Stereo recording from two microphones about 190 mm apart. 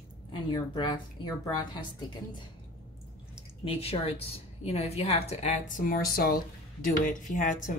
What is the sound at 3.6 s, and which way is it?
A woman's voice, 30° left (ahead or behind).